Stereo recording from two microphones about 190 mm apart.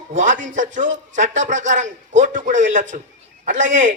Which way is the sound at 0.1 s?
40° right (ahead or behind).